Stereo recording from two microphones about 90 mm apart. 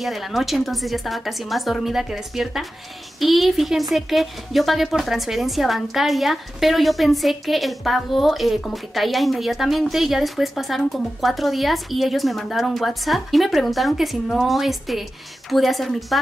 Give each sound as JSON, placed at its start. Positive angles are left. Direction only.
{"t": 0.0, "sound": "a woman's voice", "side_deg": 0}